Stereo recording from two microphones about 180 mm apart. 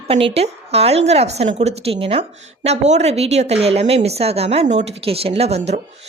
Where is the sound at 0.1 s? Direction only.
30° right (ahead or behind).